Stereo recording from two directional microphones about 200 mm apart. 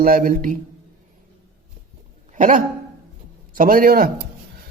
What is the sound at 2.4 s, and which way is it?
Speech, 40° right (ahead or behind).